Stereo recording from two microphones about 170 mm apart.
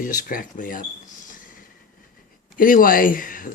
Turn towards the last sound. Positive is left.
turn(degrees=55)  # may be behind; listen again after turning